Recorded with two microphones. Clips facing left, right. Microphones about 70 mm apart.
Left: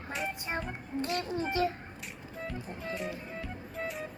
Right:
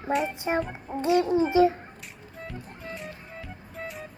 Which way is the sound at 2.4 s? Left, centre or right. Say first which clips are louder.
Left 1 dB; centre.